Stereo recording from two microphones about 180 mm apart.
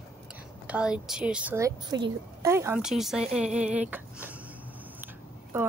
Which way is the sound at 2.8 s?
Centre (ahead or behind).